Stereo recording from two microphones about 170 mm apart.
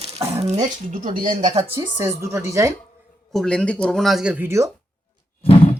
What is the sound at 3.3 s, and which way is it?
Speech, 5° left (ahead or behind).